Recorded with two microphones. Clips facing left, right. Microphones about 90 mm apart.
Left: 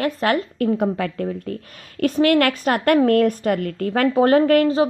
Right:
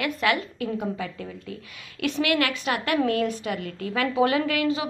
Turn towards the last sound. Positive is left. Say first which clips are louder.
# left 9 dB
turn(degrees=40)  # may be behind; listen again after turning